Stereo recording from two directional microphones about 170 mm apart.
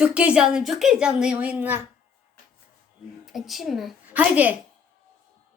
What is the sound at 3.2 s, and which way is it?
Speech, centre (ahead or behind).